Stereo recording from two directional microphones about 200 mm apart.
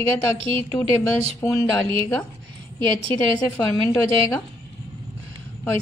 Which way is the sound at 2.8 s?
25° right (ahead or behind).